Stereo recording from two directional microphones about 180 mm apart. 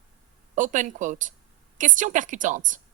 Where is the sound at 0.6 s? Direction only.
45° right (ahead or behind).